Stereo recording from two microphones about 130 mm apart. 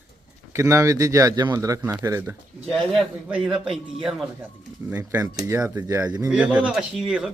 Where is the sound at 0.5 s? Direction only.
25° right (ahead or behind).